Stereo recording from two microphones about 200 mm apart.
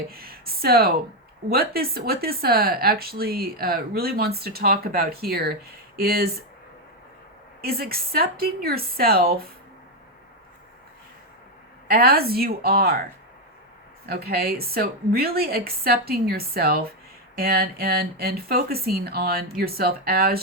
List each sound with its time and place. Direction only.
0.1 s speech: 50° right (ahead or behind)
7.6 s speech: 50° right (ahead or behind)
11.9 s speech: 50° right (ahead or behind)
14.1 s speech: 50° right (ahead or behind)